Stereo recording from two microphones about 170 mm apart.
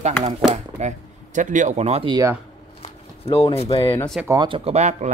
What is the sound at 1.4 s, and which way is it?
Speech, 45° right (ahead or behind).